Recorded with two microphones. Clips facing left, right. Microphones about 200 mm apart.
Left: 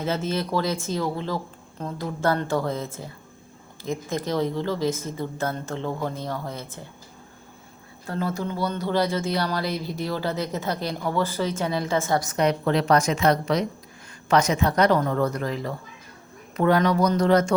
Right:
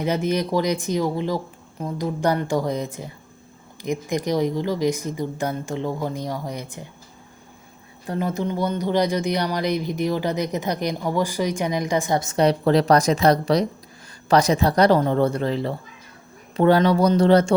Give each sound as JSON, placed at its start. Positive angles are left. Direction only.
{"t": 0.0, "sound": "speech", "side_deg": -15}
{"t": 8.0, "sound": "speech", "side_deg": -15}